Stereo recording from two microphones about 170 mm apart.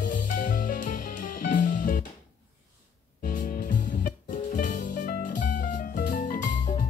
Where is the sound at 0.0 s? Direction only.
55° left (ahead or behind).